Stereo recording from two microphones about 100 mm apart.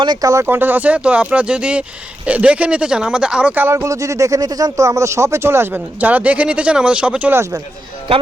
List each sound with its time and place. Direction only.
0.0 s speech: 50° right (ahead or behind)
0.4 s speech: 20° right (ahead or behind)
3.8 s speech: 35° right (ahead or behind); by 7.3 s 10° right (ahead or behind)